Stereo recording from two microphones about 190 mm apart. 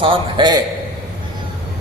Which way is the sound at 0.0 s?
25° right (ahead or behind).